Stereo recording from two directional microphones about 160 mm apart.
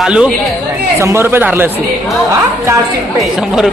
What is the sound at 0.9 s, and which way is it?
Speech, 15° right (ahead or behind).